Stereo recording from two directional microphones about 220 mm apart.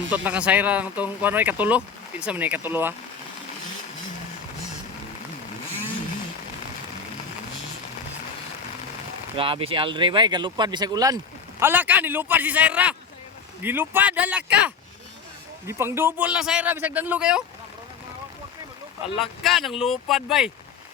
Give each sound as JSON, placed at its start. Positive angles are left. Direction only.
{"t": 0.1, "sound": "speech", "side_deg": -5}
{"t": 9.3, "sound": "speech", "side_deg": -25}
{"t": 19.2, "sound": "speech", "side_deg": 0}